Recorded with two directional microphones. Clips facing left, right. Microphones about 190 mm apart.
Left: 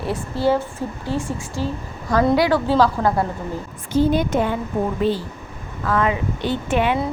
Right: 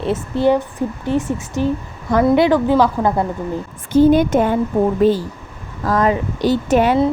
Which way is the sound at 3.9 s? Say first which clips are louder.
Right 6 dB; 50° right (ahead or behind).